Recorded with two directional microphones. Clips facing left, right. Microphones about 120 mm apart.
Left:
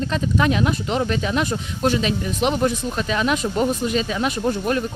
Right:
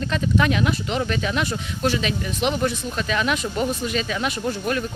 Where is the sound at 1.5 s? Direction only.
40° left (ahead or behind).